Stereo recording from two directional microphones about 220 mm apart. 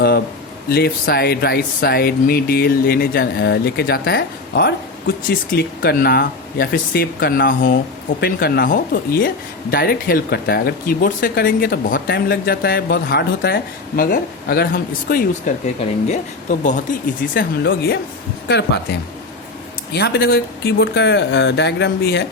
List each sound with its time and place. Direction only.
0.7 s speech: 45° left (ahead or behind)
17.3 s speech: 45° left (ahead or behind)